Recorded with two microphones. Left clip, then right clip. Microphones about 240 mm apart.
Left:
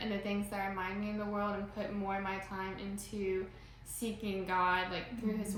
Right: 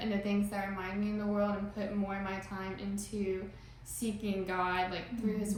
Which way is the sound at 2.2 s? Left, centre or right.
Centre.